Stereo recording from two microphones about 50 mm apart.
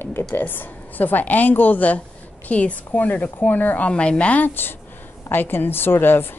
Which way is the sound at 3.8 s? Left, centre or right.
Left.